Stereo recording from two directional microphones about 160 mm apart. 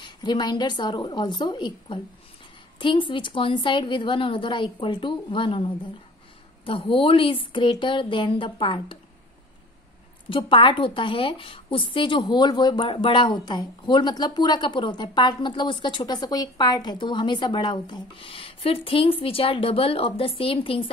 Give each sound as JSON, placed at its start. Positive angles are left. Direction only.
{"t": 0.0, "sound": "a woman's voice", "side_deg": 25}
{"t": 10.3, "sound": "a woman's voice", "side_deg": 30}